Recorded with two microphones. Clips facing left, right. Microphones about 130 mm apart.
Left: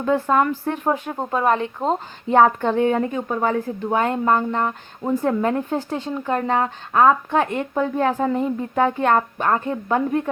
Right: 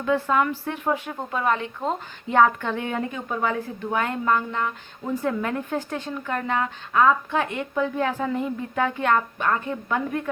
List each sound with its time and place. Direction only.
0.0 s speech: 40° left (ahead or behind)